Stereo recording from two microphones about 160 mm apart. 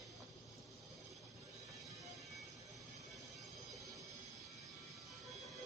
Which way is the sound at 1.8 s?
Centre (ahead or behind).